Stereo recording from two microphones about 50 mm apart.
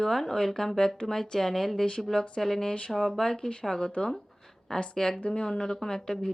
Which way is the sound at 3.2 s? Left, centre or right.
Centre.